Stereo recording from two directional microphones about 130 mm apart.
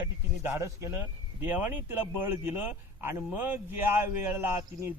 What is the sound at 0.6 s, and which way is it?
A man's voice, 20° right (ahead or behind).